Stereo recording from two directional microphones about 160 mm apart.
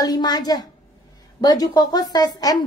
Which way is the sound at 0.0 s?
25° left (ahead or behind).